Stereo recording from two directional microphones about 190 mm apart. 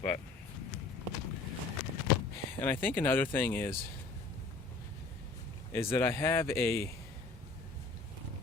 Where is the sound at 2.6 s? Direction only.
10° left (ahead or behind).